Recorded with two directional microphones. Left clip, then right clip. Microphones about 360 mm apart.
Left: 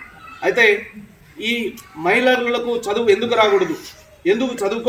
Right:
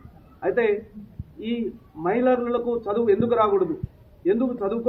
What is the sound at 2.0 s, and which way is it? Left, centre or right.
Speech, centre.